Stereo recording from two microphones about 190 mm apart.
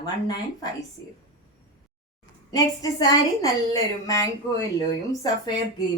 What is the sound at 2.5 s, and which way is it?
Speech, 20° left (ahead or behind).